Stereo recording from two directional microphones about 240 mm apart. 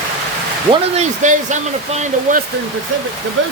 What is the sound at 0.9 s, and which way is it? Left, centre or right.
Speech, right.